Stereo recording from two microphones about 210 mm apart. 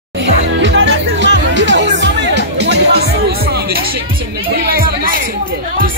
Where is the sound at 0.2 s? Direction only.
60° right (ahead or behind).